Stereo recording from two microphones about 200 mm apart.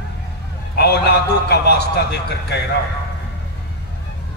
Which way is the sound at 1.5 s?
55° left (ahead or behind).